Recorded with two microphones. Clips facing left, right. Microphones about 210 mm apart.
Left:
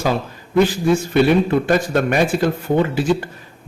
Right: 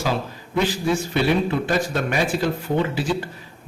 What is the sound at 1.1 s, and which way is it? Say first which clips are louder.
A man's voice: left 6 dB; 50° left (ahead or behind).